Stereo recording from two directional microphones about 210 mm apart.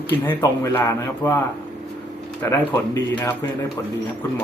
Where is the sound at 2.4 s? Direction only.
10° left (ahead or behind).